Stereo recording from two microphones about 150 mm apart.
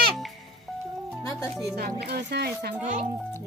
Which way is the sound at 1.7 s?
90° right.